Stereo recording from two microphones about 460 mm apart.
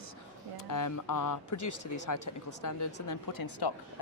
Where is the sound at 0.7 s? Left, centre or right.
Left.